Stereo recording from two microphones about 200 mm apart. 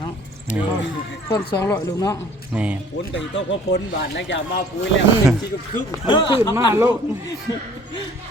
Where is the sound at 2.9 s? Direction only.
65° left (ahead or behind).